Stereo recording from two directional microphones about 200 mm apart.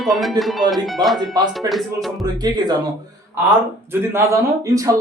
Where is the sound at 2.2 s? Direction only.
20° right (ahead or behind).